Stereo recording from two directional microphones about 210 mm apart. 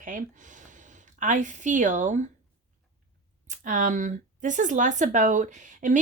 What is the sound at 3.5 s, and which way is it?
A woman's voice, 35° right (ahead or behind).